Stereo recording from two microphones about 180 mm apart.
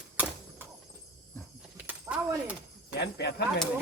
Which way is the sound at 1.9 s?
5° right (ahead or behind).